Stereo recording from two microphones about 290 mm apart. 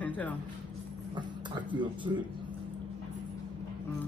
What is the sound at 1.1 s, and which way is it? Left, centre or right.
Clip-clop, centre.